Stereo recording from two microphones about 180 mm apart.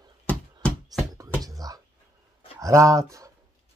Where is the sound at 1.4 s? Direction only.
20° right (ahead or behind).